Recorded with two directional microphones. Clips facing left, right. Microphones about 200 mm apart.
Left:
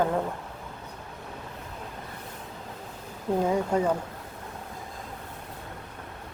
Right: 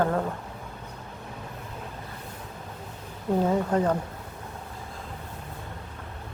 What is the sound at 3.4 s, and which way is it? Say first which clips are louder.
Speech: right 1 dB; 10° left (ahead or behind).